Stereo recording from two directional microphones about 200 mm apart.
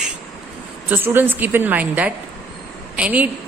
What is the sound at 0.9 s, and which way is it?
A woman's voice, 10° right (ahead or behind).